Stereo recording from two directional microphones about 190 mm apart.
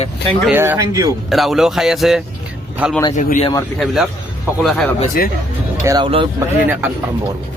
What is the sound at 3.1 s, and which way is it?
Speech, 40° left (ahead or behind).